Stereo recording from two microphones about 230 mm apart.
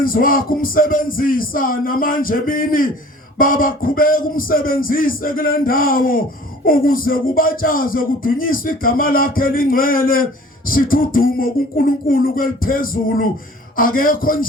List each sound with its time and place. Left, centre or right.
0.0 s speech: left